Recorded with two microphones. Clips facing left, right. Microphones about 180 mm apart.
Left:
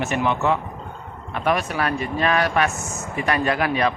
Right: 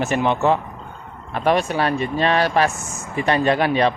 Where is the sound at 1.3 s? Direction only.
30° right (ahead or behind).